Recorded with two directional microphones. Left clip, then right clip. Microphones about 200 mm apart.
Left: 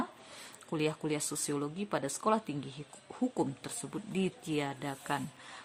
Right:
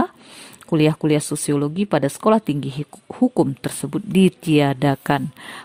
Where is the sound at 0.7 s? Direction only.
45° right (ahead or behind).